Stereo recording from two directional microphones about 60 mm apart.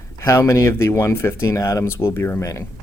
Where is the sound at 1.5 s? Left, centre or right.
Left.